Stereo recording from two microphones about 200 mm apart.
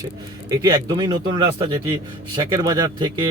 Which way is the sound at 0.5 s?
20° right (ahead or behind).